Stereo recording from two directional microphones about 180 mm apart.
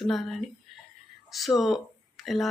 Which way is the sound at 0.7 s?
Centre (ahead or behind).